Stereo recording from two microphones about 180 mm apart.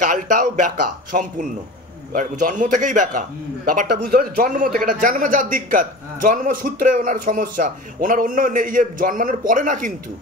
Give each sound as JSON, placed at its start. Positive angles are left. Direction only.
{"t": 0.0, "sound": "speech", "side_deg": -45}